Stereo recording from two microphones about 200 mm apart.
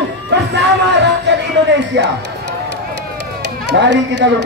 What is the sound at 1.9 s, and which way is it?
Music, 60° right (ahead or behind).